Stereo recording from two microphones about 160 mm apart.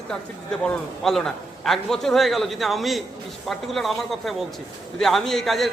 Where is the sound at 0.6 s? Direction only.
5° left (ahead or behind).